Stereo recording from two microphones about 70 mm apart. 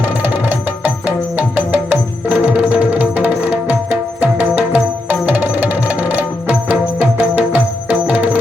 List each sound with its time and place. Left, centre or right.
1.0 s music: right
2.4 s tabla: centre